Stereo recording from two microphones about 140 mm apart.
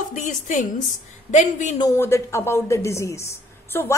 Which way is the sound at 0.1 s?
65° left (ahead or behind).